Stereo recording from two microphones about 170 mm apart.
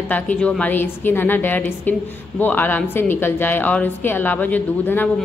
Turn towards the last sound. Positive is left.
turn(degrees=10)  # may be behind; listen again after turning